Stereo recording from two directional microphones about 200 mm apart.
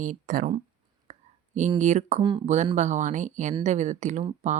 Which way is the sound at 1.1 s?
35° right (ahead or behind).